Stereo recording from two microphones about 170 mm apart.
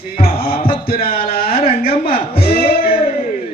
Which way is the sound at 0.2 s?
60° left (ahead or behind).